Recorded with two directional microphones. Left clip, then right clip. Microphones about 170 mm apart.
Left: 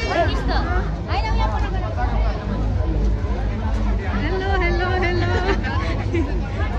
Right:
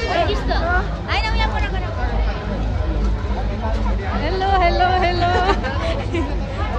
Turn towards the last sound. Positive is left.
turn(degrees=-20)  # may be behind; listen again after turning